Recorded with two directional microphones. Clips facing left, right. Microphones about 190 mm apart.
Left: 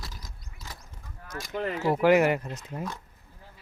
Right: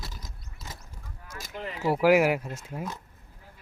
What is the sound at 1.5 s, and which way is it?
Speech, 55° left (ahead or behind).